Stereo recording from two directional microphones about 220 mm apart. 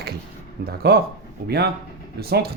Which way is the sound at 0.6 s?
45° right (ahead or behind).